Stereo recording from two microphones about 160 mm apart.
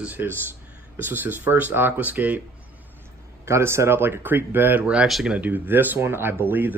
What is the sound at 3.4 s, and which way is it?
Speech, 15° right (ahead or behind).